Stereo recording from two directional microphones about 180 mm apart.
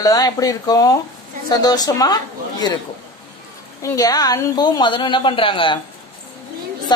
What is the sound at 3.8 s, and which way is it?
Speech, 20° left (ahead or behind).